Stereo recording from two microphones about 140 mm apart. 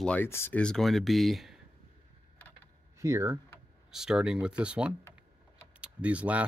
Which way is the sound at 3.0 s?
20° right (ahead or behind).